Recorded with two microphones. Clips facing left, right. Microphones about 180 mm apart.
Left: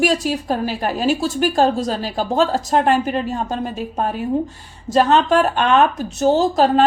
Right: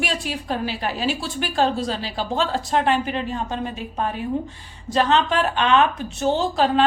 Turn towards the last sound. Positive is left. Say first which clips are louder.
# left 5 dB
turn(degrees=40)  # may be behind; listen again after turning